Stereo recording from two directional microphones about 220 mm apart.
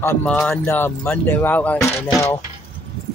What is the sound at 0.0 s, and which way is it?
Speech, 10° left (ahead or behind).